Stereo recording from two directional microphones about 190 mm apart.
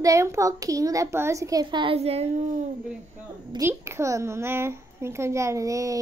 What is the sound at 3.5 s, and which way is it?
A child's voice, 15° right (ahead or behind).